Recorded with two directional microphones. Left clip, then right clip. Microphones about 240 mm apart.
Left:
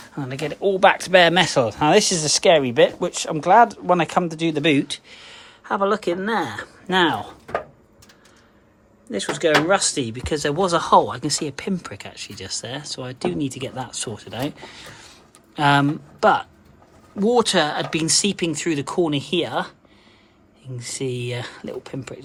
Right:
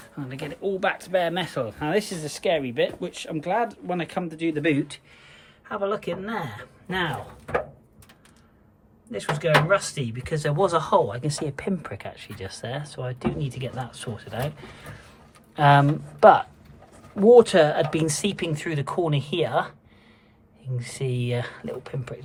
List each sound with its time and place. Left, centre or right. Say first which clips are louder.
0.2 s speech: left 7 dB; left
9.1 s speech: left 3 dB; centre
20.7 s speech: left 4 dB; centre